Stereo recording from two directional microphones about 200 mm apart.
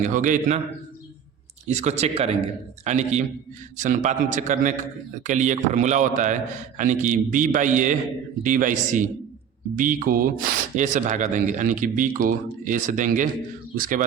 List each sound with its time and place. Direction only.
0.0 s speech: 40° right (ahead or behind)
1.6 s a man's voice: 35° right (ahead or behind)